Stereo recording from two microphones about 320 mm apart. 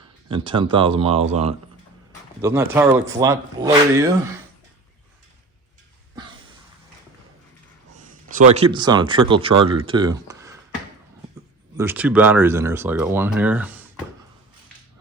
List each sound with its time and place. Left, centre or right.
0.3 s speech: centre
2.4 s speech: centre
7.9 s speech: right
11.8 s speech: centre